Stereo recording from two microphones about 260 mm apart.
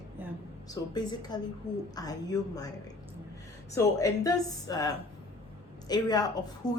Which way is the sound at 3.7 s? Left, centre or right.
Centre.